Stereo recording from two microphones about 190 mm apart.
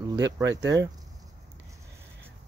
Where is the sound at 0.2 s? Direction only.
15° right (ahead or behind).